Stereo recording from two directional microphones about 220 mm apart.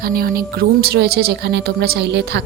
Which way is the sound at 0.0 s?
45° right (ahead or behind).